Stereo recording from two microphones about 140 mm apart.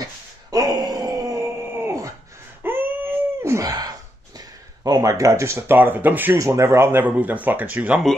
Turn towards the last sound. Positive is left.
turn(degrees=-10)  # may be behind; listen again after turning